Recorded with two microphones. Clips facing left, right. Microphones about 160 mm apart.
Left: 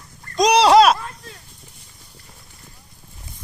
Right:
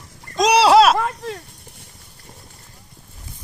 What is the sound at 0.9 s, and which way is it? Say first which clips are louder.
Snake: right 7 dB; 75° right (ahead or behind).